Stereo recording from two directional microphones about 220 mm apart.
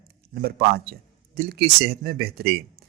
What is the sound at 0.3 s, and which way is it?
A man's voice, 45° right (ahead or behind).